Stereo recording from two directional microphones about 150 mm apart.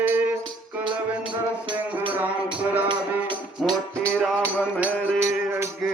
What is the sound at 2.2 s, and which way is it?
Music, 10° right (ahead or behind).